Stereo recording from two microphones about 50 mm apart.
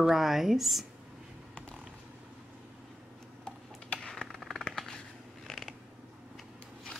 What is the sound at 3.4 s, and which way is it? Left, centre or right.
Tick-tock, left.